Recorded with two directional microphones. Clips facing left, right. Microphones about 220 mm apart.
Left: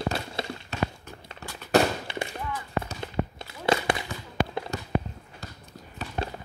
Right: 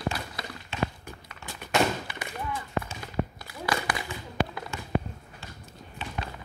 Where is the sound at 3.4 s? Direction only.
25° left (ahead or behind).